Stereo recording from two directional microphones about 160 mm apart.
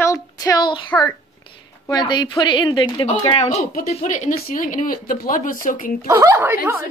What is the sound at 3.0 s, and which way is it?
Speech, 45° left (ahead or behind).